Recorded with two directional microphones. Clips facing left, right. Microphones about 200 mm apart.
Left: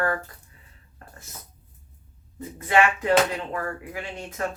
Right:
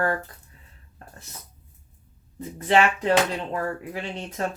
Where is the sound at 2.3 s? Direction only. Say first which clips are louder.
Right 1 dB; 30° right (ahead or behind).